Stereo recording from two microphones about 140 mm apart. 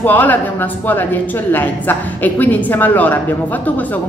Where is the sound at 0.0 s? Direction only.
10° left (ahead or behind).